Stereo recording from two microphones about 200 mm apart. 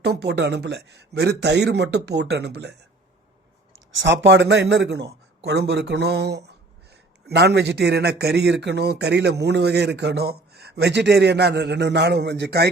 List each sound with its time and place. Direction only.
0.0 s speech: 55° right (ahead or behind)
4.0 s speech: 65° right (ahead or behind)